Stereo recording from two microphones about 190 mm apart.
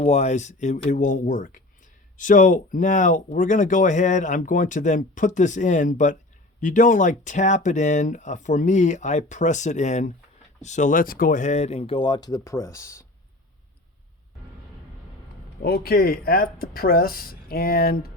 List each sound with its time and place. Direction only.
0.0 s speech: 35° left (ahead or behind); by 13.1 s 15° left (ahead or behind)
15.6 s speech: 55° left (ahead or behind)